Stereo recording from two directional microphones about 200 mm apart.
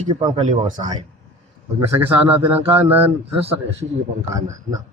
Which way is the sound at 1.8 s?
10° right (ahead or behind).